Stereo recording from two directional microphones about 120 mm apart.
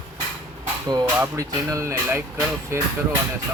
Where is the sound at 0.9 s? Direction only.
25° right (ahead or behind).